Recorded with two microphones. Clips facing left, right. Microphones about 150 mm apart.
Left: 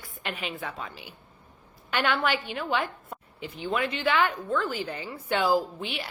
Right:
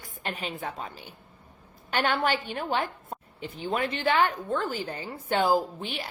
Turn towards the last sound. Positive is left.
turn(degrees=-45)  # may be behind; listen again after turning